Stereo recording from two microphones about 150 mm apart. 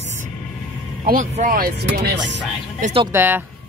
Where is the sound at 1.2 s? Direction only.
60° right (ahead or behind); by 2.1 s 90° right.